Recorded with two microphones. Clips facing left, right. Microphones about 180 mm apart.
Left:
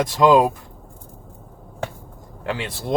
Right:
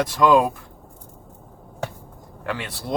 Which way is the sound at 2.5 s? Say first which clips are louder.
Left 3 dB; 25° left (ahead or behind).